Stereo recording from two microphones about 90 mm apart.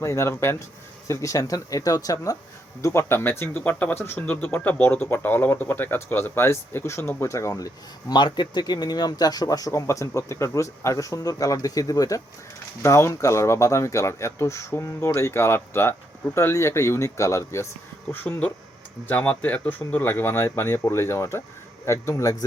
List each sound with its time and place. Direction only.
0.0 s speech: 30° left (ahead or behind)
8.1 s speech: 55° left (ahead or behind); by 17.7 s 35° left (ahead or behind)
18.1 s speech: 20° left (ahead or behind); by 22.4 s 35° left (ahead or behind)